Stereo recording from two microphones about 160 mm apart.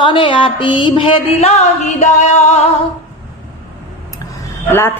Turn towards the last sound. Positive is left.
turn(degrees=15)  # may be behind; listen again after turning